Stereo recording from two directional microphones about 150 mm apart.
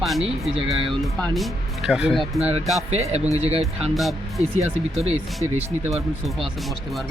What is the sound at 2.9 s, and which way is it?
Speech, 45° right (ahead or behind).